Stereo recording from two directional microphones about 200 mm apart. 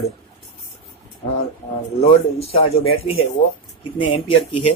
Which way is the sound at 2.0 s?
30° left (ahead or behind).